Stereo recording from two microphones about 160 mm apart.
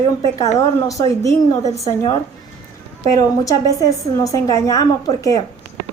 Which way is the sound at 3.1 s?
20° left (ahead or behind).